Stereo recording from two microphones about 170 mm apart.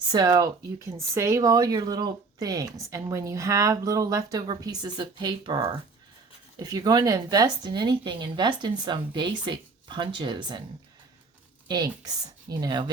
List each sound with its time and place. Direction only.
0.1 s speech: 25° right (ahead or behind)
11.7 s speech: 25° right (ahead or behind)